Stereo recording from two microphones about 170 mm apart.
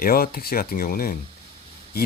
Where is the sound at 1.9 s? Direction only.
65° left (ahead or behind).